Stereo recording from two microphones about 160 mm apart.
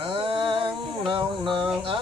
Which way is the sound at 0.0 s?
35° right (ahead or behind).